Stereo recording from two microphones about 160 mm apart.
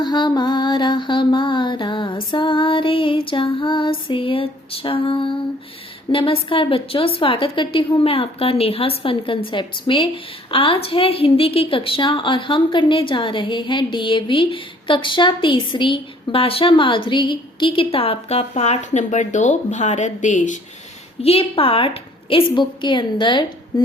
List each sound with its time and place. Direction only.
0.0 s a sound: 25° left (ahead or behind)
6.1 s a woman's voice: 35° left (ahead or behind); by 20.6 s 50° left (ahead or behind)
21.2 s a woman's voice: 40° left (ahead or behind)